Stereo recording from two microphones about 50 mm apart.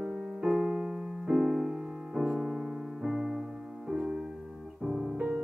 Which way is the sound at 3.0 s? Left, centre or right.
Centre.